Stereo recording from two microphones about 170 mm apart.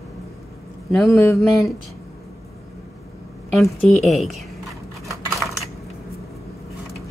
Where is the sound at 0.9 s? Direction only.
Centre (ahead or behind).